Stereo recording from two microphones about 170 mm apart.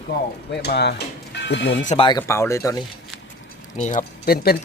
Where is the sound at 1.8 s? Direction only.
40° left (ahead or behind).